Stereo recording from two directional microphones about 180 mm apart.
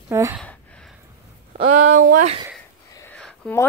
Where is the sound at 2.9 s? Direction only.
15° left (ahead or behind).